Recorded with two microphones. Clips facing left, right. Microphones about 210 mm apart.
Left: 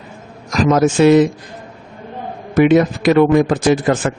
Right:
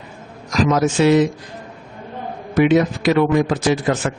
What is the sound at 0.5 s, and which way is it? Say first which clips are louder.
Speech: left 3 dB; 50° left (ahead or behind).